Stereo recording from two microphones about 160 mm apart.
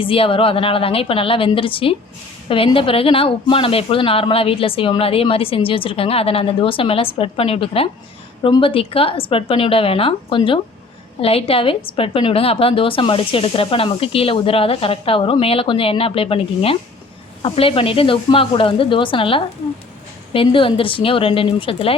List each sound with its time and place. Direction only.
0.0 s a woman's voice: 35° left (ahead or behind)